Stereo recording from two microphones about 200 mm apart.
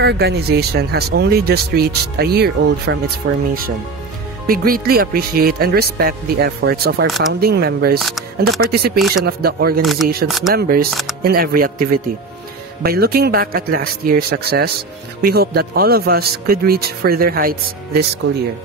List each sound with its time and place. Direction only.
0.0 s speech: 55° right (ahead or behind)
4.5 s speech: 45° right (ahead or behind)
10.2 s speech: centre (ahead or behind)
10.5 s speech: 50° right (ahead or behind)
10.9 s speech: centre (ahead or behind)
11.2 s speech: 50° right (ahead or behind)
12.8 s speech: 50° right (ahead or behind)